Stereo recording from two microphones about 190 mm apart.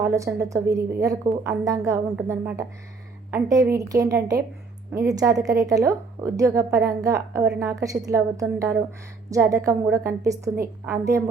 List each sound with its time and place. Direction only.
0.0 s a woman's voice: 15° right (ahead or behind)